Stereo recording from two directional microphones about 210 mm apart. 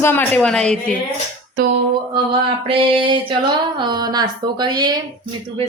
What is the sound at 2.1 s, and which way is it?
A woman's voice, 25° right (ahead or behind).